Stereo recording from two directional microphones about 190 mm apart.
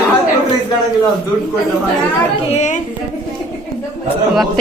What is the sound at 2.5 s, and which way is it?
Speech, 40° left (ahead or behind).